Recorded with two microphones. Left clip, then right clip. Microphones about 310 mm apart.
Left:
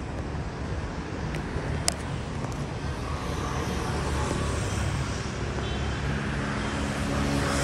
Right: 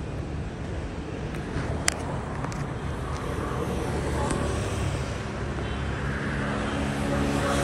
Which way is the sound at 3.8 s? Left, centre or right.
Centre.